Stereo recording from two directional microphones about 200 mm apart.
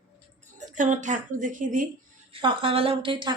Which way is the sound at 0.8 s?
40° right (ahead or behind).